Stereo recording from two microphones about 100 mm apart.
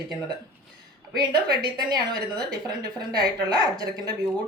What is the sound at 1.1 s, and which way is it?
A woman's voice, 45° right (ahead or behind).